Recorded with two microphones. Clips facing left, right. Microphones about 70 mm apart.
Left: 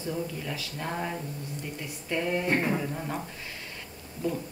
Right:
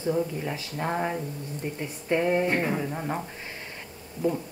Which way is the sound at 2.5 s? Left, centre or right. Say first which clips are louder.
Right 1 dB; centre.